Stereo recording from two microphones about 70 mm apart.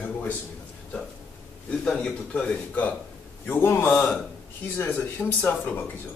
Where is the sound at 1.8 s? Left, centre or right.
Centre.